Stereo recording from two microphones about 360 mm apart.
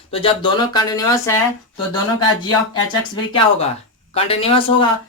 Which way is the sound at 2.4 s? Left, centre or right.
Centre.